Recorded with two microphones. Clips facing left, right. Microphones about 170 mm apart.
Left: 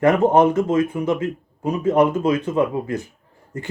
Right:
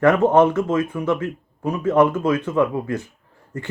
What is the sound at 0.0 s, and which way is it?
Speech, 15° left (ahead or behind).